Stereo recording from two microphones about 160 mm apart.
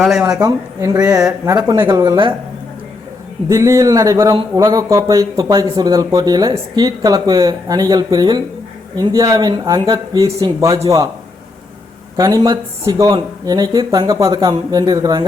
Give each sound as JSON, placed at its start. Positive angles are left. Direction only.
{"t": 0.0, "sound": "speech", "side_deg": 0}
{"t": 0.4, "sound": "speech", "side_deg": -20}
{"t": 3.5, "sound": "speech", "side_deg": -20}
{"t": 12.1, "sound": "speech", "side_deg": -20}